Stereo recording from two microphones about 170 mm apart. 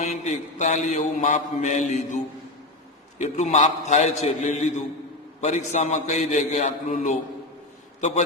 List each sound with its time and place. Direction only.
0.0 s mantra: 45° left (ahead or behind)